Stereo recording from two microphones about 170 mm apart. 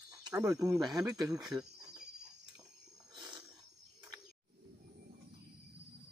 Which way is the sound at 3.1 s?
25° right (ahead or behind).